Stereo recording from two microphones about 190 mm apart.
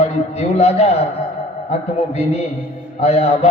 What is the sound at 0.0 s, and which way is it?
Speech, 35° left (ahead or behind).